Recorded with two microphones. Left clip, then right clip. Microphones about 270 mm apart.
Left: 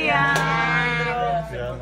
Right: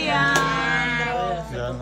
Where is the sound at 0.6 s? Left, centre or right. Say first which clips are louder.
Left 1 dB; centre.